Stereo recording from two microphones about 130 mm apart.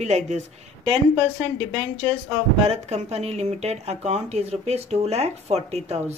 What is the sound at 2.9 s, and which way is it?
Speech, 55° right (ahead or behind).